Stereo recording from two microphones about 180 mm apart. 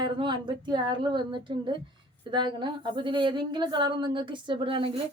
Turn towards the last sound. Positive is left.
turn(degrees=-30)  # may be behind; listen again after turning